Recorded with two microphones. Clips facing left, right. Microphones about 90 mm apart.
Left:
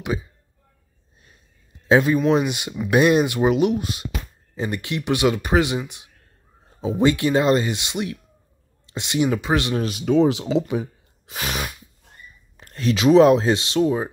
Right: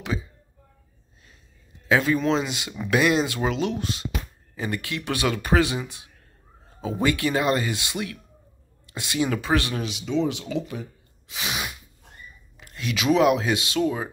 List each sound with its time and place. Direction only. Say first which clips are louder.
0.0 s speech: left 3 dB; 15° left (ahead or behind)
1.9 s speech: left 4 dB; 20° left (ahead or behind)
9.8 s speech: left 7 dB; 55° left (ahead or behind)
11.2 s sneeze: left 3 dB; 50° left (ahead or behind)
12.5 s speech: left 7 dB; 40° left (ahead or behind)